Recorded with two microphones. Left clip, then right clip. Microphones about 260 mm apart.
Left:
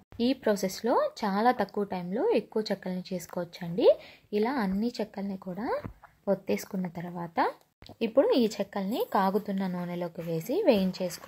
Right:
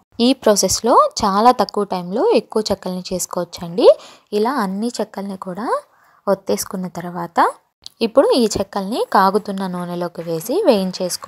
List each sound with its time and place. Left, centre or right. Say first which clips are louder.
0.2 s speech: right 13 dB; right